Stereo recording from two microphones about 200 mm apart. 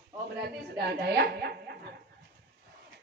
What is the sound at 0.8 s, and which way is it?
Speech, 55° right (ahead or behind).